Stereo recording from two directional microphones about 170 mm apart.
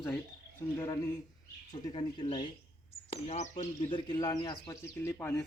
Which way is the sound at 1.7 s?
25° left (ahead or behind).